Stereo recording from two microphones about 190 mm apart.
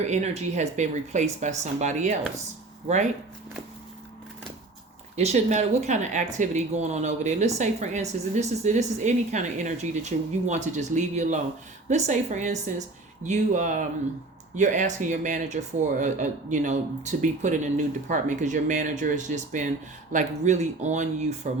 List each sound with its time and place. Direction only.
0.1 s speech: 35° right (ahead or behind)
5.1 s speech: 35° right (ahead or behind)